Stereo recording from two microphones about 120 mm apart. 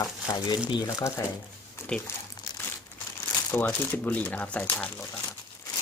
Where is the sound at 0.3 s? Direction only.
35° left (ahead or behind).